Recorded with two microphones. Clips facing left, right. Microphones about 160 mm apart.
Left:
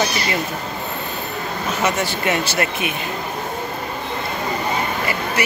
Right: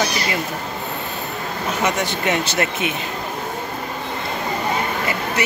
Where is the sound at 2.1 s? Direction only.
20° right (ahead or behind).